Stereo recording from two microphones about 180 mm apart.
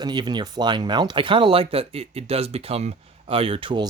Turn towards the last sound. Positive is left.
turn(degrees=-30)  # may be behind; listen again after turning